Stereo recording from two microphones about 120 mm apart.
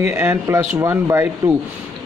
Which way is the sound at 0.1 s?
20° right (ahead or behind).